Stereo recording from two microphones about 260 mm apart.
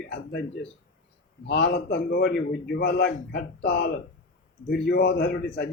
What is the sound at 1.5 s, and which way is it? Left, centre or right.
A man's voice, left.